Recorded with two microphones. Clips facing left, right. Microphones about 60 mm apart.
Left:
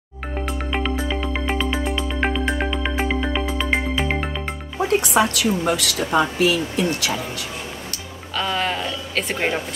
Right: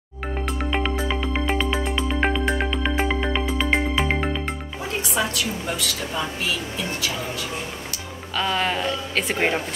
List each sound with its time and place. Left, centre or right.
0.5 s music: centre
5.0 s a woman's voice: left
8.4 s speech: centre